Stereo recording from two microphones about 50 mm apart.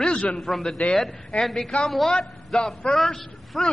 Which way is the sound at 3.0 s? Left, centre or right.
Centre.